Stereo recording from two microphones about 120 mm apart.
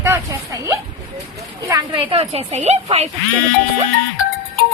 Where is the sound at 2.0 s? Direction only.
55° right (ahead or behind).